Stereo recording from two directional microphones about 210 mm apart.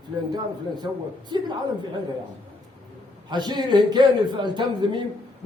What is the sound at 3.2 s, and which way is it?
A man's voice, 20° right (ahead or behind).